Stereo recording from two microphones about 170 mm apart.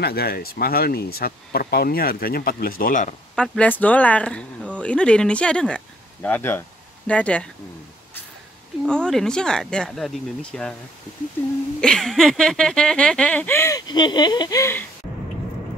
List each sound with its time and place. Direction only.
0.0 s speech: 65° left (ahead or behind)
3.3 s speech: 10° left (ahead or behind)
8.8 s speech: 5° left (ahead or behind)
11.8 s speech: 5° left (ahead or behind)